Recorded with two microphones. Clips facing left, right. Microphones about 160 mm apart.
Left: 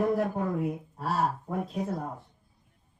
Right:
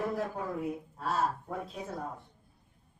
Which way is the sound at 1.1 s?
10° left (ahead or behind).